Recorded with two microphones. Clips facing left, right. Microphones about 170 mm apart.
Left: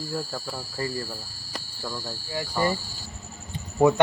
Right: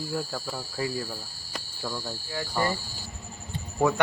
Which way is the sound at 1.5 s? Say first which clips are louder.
Even; 5° right (ahead or behind).